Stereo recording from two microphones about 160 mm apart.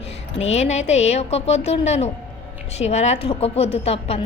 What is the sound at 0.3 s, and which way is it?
A woman's voice, 45° left (ahead or behind).